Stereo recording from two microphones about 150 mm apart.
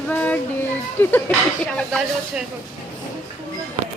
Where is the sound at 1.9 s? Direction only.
5° right (ahead or behind).